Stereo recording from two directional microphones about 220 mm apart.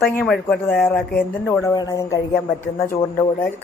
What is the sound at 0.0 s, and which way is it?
Speech, 5° left (ahead or behind).